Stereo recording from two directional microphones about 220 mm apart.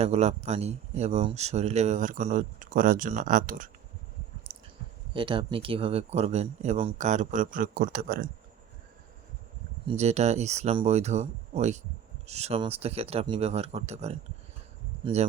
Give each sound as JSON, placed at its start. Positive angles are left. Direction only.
{"t": 0.0, "sound": "speech", "side_deg": -30}
{"t": 5.1, "sound": "speech", "side_deg": -20}
{"t": 9.8, "sound": "speech", "side_deg": -30}